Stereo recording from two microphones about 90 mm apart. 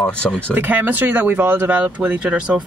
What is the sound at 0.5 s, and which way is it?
Speech, 20° right (ahead or behind).